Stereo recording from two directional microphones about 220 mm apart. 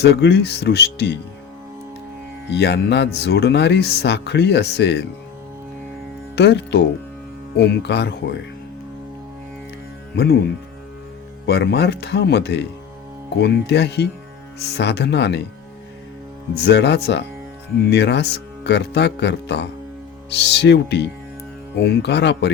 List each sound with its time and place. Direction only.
0.0 s speech: 50° left (ahead or behind)
2.5 s speech: 50° left (ahead or behind)
6.3 s speech: 50° left (ahead or behind)
11.4 s speech: 50° left (ahead or behind)
16.6 s speech: 50° left (ahead or behind)